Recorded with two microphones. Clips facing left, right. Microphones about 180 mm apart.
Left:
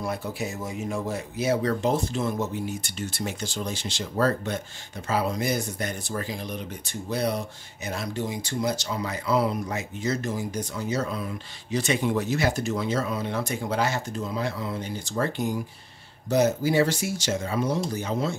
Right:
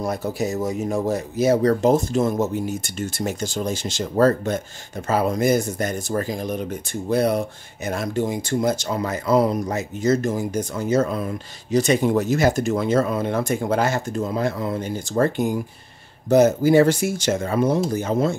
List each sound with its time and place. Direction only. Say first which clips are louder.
0.0 s speech: right 6 dB; 40° right (ahead or behind)